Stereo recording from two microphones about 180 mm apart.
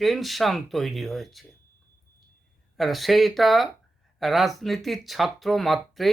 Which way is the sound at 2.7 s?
Centre (ahead or behind).